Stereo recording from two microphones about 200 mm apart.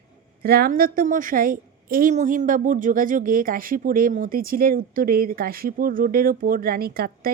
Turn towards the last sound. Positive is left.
turn(degrees=-50)  # may be behind; listen again after turning